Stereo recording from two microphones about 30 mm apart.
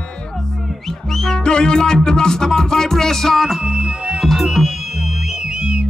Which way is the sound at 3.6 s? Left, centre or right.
Right.